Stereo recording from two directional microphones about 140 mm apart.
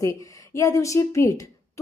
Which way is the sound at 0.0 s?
20° left (ahead or behind).